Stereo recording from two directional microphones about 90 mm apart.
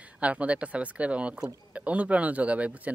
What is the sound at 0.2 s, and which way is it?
Speech, 15° right (ahead or behind).